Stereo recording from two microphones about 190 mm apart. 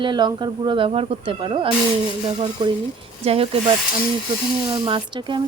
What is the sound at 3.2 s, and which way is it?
A woman's voice, 30° right (ahead or behind).